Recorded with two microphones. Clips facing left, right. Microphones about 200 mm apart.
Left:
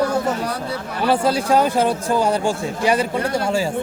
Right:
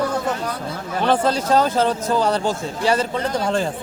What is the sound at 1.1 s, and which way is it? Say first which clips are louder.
A man's voice: left 1 dB; 10° left (ahead or behind).